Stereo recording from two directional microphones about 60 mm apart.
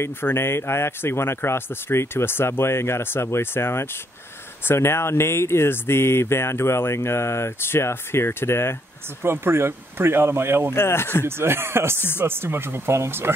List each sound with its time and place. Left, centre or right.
0.0 s speech: left
9.2 s speech: right
10.7 s speech: left
11.2 s speech: right